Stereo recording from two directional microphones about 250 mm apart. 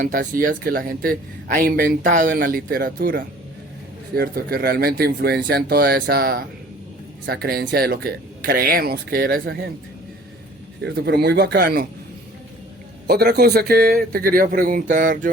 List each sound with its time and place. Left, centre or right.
0.0 s a man's voice: right
10.8 s a man's voice: right
13.1 s a man's voice: right